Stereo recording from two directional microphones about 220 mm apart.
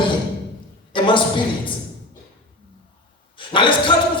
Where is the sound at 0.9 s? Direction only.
20° left (ahead or behind).